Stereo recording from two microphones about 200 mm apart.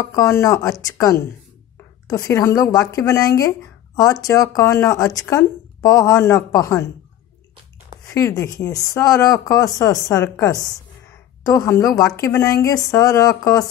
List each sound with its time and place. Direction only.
0.0 s speech: 15° left (ahead or behind)
8.1 s speech: 15° left (ahead or behind)